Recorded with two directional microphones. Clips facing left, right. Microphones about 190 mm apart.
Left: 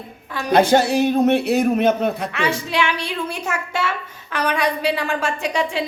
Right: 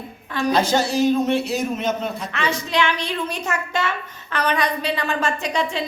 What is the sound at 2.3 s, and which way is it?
A woman's voice, 10° left (ahead or behind).